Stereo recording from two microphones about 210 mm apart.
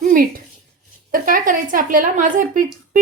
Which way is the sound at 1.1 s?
40° right (ahead or behind).